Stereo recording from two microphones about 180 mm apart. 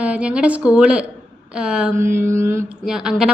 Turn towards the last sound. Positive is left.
turn(degrees=-5)  # may be behind; listen again after turning